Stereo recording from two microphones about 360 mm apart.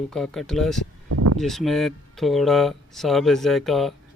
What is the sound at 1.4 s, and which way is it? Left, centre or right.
Speech, centre.